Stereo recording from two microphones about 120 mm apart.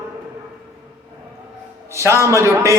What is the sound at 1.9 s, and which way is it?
Speech, 25° right (ahead or behind).